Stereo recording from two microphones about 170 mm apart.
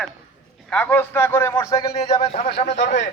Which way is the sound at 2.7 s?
90° left.